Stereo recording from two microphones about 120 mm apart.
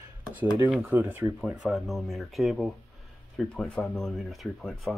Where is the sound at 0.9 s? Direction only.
20° right (ahead or behind).